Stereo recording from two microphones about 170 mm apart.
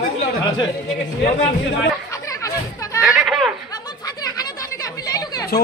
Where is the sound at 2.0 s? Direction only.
20° left (ahead or behind).